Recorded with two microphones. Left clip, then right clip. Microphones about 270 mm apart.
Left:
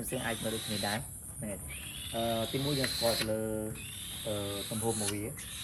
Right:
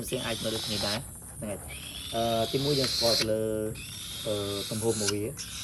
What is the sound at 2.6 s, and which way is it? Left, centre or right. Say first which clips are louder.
Owl: right 6 dB; centre.